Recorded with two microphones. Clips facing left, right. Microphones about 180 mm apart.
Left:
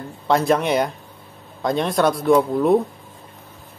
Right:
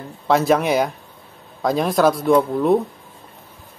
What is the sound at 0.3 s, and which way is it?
Speech, 5° right (ahead or behind).